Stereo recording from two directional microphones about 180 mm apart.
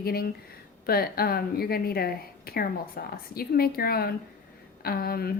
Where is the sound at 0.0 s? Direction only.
60° left (ahead or behind).